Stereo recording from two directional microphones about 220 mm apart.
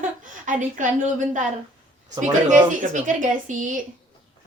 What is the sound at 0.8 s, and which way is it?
Speech, 35° right (ahead or behind).